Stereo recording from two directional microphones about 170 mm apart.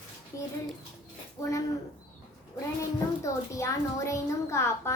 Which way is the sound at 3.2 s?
15° left (ahead or behind).